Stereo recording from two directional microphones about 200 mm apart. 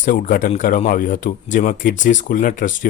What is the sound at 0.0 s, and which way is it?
A man's voice, 40° left (ahead or behind).